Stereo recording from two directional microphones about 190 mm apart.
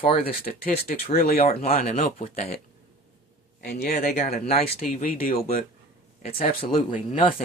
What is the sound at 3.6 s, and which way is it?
Speech, 55° left (ahead or behind).